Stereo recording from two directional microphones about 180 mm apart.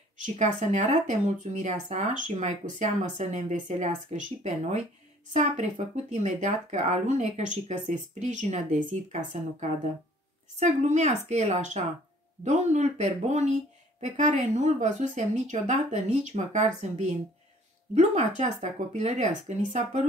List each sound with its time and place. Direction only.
0.2 s speech: 40° right (ahead or behind)